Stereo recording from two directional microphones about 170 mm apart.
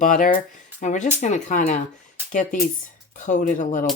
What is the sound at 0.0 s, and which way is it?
Speech, 50° left (ahead or behind).